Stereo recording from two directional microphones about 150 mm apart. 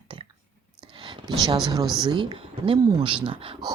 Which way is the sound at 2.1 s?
35° right (ahead or behind).